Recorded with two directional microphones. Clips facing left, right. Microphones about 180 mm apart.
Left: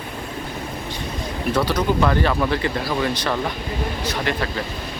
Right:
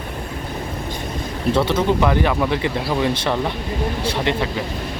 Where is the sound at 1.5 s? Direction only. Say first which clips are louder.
Right 3 dB; 25° right (ahead or behind).